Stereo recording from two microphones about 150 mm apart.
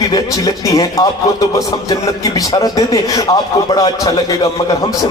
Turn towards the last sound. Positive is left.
turn(degrees=25)  # may be behind; listen again after turning